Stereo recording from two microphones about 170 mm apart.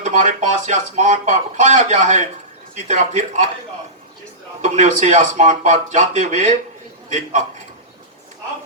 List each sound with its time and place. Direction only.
0.0 s speech: 45° right (ahead or behind)
4.6 s speech: 45° right (ahead or behind)